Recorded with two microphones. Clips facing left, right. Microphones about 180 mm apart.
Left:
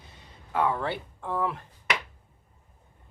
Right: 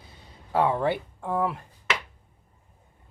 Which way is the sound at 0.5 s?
30° right (ahead or behind).